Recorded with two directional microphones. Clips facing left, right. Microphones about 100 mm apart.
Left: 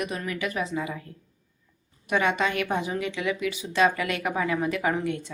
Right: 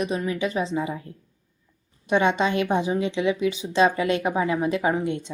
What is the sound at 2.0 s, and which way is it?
Speech, 25° right (ahead or behind).